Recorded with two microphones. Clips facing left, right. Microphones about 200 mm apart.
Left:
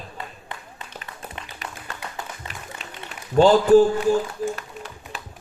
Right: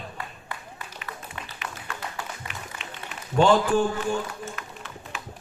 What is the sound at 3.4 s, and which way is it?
Speech, 35° left (ahead or behind).